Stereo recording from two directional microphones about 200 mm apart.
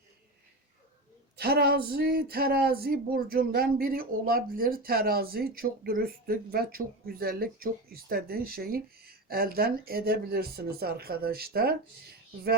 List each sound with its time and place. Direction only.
1.4 s speech: 50° right (ahead or behind)